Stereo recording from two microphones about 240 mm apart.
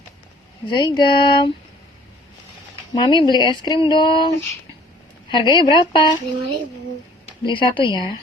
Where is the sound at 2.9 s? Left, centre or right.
Centre.